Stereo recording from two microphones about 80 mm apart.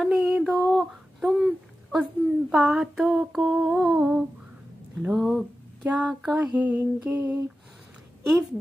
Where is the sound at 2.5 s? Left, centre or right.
Centre.